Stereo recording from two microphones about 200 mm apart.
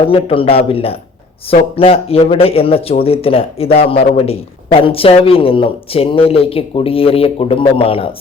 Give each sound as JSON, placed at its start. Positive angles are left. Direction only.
{"t": 0.0, "sound": "speech", "side_deg": 25}